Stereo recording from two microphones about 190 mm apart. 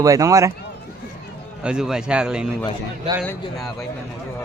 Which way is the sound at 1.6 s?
5° right (ahead or behind).